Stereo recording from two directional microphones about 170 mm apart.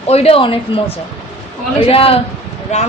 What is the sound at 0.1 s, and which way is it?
Speech, 35° left (ahead or behind).